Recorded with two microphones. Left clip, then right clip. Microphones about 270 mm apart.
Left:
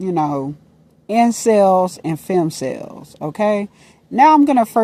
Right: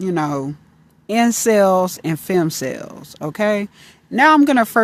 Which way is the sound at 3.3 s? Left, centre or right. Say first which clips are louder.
Left 1 dB; centre.